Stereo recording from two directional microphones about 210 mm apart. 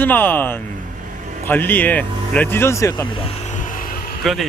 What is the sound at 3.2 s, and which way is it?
Vehicle, 35° left (ahead or behind).